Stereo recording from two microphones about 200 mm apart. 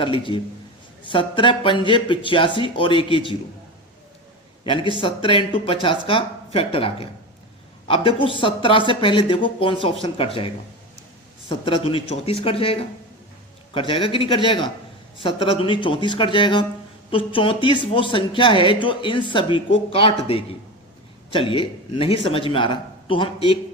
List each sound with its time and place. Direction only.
0.0 s speech: 25° left (ahead or behind)
4.6 s speech: 25° left (ahead or behind)